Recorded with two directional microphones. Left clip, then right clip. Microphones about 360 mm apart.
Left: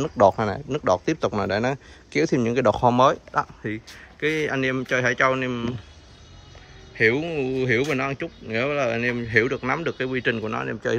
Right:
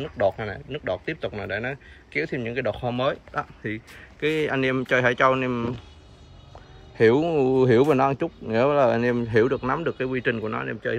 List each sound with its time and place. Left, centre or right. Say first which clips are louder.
0.0 s speech: left 6 dB; left
2.8 s speech: left 10 dB; centre
3.6 s speech: left 1 dB; centre
7.0 s speech: right 2 dB; centre